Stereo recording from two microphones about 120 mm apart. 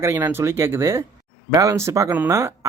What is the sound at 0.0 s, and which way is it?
Speech, 20° right (ahead or behind).